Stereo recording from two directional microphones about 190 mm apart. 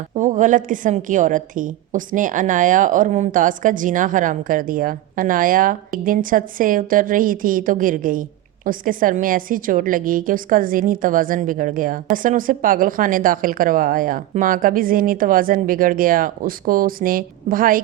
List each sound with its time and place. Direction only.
0.1 s a woman's voice: 40° right (ahead or behind)